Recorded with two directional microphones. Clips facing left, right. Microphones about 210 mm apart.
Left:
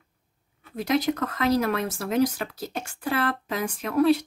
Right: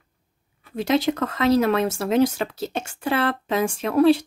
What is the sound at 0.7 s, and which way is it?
Speech, 25° right (ahead or behind).